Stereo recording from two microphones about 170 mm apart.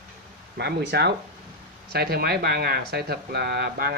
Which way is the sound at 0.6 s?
75° right (ahead or behind).